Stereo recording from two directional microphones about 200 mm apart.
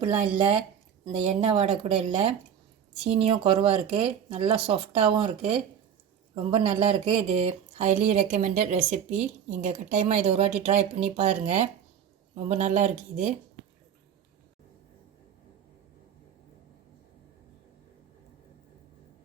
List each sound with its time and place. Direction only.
1.0 s speech: 25° right (ahead or behind)